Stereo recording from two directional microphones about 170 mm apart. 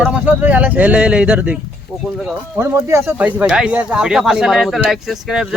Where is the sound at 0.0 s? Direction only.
10° right (ahead or behind).